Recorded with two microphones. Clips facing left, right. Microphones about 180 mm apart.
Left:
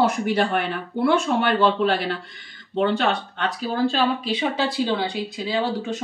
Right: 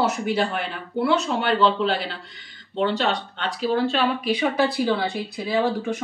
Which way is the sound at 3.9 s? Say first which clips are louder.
Even; 35° left (ahead or behind).